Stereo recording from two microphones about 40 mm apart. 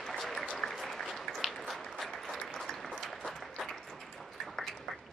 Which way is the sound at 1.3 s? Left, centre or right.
Centre.